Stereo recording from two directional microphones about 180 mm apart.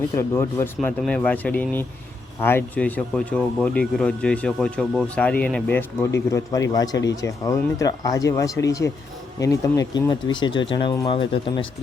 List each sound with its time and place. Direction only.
0.1 s speech: 15° left (ahead or behind)
6.0 s speech: 15° left (ahead or behind)